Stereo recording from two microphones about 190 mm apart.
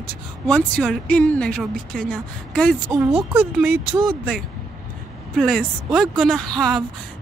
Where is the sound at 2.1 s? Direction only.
5° left (ahead or behind).